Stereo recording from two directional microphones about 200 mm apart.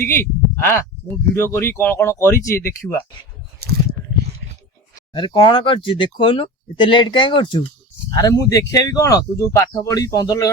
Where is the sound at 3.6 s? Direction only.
55° right (ahead or behind).